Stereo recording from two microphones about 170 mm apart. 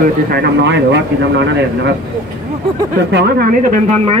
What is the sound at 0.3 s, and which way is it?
Speech, 80° right.